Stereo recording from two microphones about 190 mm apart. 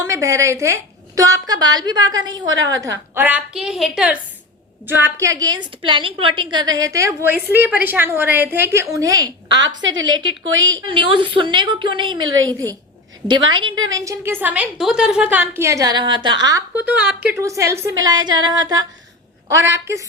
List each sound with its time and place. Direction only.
0.0 s a woman's voice: 15° right (ahead or behind)
10.7 s a woman's voice: 25° right (ahead or behind)
16.8 s a woman's voice: 10° right (ahead or behind)